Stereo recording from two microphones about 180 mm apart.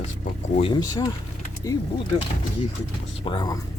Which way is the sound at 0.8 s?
20° left (ahead or behind).